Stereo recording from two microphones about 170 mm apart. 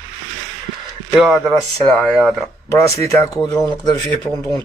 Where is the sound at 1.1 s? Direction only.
Centre (ahead or behind).